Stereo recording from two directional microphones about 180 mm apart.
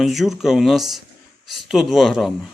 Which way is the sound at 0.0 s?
Centre (ahead or behind).